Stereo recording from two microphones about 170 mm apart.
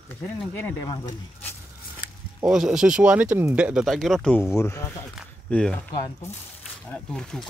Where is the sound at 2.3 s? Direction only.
5° right (ahead or behind).